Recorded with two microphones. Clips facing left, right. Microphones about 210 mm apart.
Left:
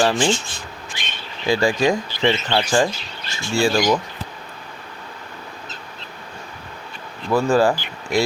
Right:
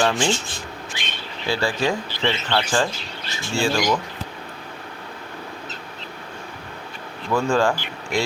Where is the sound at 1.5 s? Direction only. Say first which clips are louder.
Left 5 dB; 15° left (ahead or behind).